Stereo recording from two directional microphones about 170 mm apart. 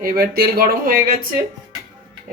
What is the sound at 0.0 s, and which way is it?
Speech, 65° right (ahead or behind).